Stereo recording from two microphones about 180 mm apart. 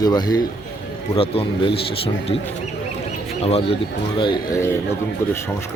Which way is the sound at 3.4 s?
35° left (ahead or behind).